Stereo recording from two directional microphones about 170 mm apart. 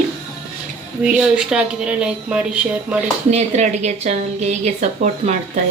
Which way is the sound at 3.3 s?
40° right (ahead or behind).